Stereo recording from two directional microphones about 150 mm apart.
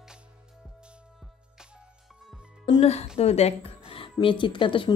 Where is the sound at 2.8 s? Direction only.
45° left (ahead or behind).